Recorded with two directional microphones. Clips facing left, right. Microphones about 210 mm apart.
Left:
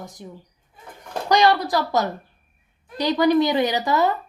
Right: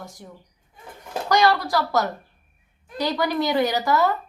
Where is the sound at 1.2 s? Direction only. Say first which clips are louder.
Left 2 dB; 15° left (ahead or behind).